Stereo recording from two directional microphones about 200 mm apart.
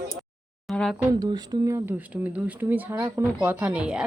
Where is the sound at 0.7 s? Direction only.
Centre (ahead or behind).